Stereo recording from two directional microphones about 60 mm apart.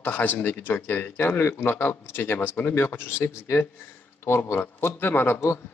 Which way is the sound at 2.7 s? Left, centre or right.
Left.